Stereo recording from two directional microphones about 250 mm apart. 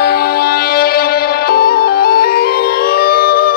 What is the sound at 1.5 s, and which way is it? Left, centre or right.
Music, left.